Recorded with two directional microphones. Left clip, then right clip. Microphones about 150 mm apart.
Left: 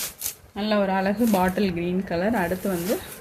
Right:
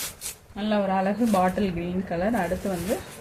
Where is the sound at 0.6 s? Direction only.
80° left.